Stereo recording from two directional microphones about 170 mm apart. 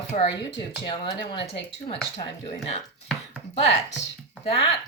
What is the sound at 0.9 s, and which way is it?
Speech, 30° left (ahead or behind).